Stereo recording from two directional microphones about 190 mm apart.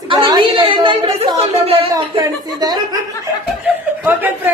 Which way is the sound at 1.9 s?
20° right (ahead or behind).